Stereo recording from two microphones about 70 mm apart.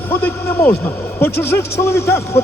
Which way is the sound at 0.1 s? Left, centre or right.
Left.